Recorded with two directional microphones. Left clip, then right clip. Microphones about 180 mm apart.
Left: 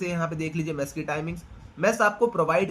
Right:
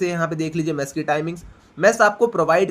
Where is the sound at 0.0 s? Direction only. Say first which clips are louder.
Right 7 dB; 45° right (ahead or behind).